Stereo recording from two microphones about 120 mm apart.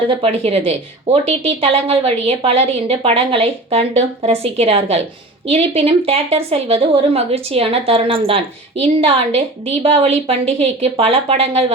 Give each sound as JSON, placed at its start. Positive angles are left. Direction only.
{"t": 0.1, "sound": "a woman's voice", "side_deg": -55}